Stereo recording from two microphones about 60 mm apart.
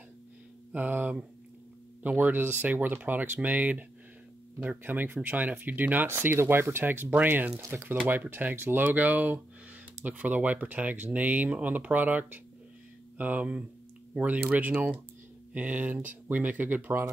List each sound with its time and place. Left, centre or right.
0.7 s speech: right
2.1 s speech: right
7.5 s speech: right
8.1 s speech: right